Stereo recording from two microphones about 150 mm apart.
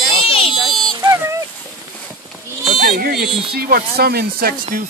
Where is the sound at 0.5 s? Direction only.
Centre (ahead or behind).